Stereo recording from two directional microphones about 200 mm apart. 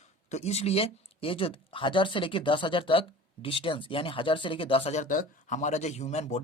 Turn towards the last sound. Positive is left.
turn(degrees=35)  # may be behind; listen again after turning